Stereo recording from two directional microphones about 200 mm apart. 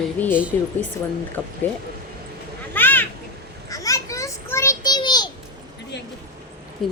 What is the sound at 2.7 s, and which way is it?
Children playing, 10° left (ahead or behind).